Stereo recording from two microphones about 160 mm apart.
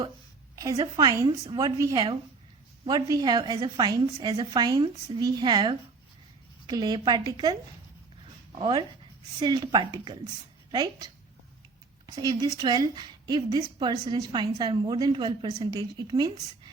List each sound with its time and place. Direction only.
0.5 s a woman's voice: 20° right (ahead or behind)